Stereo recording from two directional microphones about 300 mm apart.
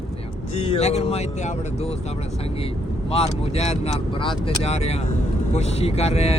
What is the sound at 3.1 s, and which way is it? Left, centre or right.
Speech, centre.